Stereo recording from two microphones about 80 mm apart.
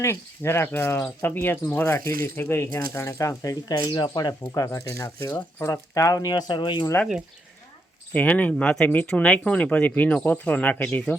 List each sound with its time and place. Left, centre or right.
0.0 s speech: left
4.5 s speech: left
8.1 s speech: centre